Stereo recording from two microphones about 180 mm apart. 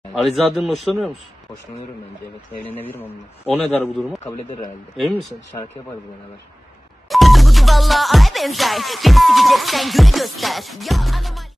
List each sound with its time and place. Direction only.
0.1 s a man's voice: centre (ahead or behind)
2.6 s a man's voice: 10° left (ahead or behind)
4.2 s speech: 15° left (ahead or behind)
7.1 s music: centre (ahead or behind)